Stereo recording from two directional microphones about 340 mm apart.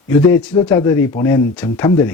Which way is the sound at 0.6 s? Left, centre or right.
Centre.